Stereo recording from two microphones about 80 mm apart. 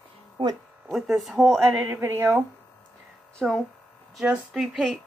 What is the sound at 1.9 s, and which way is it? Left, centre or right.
Speech, right.